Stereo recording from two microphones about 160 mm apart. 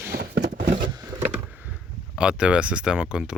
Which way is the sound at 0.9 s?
25° right (ahead or behind).